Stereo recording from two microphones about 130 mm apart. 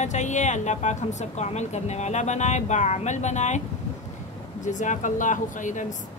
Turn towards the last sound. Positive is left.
turn(degrees=75)  # may be behind; listen again after turning